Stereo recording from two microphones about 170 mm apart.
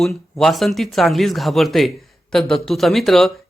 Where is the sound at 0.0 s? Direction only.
Centre (ahead or behind).